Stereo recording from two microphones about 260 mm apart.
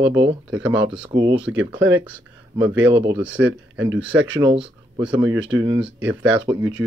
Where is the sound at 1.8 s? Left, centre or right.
Right.